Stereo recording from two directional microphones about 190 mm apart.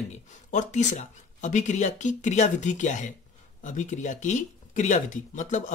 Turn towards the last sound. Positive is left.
turn(degrees=40)  # may be behind; listen again after turning